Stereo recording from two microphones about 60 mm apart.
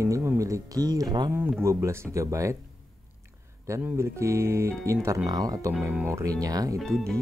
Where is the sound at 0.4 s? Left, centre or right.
Right.